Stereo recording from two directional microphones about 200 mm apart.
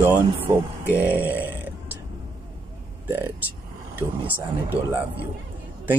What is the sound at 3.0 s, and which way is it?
Speech, 10° right (ahead or behind).